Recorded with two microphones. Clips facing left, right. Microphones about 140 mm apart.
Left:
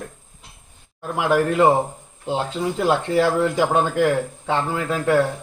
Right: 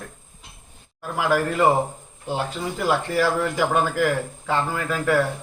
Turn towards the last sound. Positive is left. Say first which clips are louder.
# left 2 dB
turn(degrees=25)  # may be behind; listen again after turning